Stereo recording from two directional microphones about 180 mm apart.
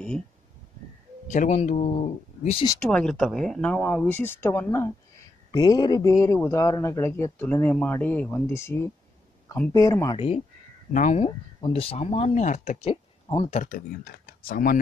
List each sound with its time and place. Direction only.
1.3 s speech: 40° left (ahead or behind)
2.8 s a man's voice: 5° left (ahead or behind)
10.1 s speech: 35° left (ahead or behind)
13.5 s speech: 45° left (ahead or behind)